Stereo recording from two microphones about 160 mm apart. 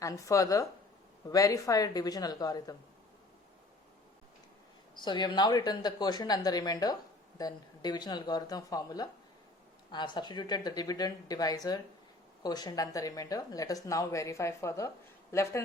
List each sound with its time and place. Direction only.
0.0 s speech: 20° left (ahead or behind)
4.9 s speech: 25° left (ahead or behind)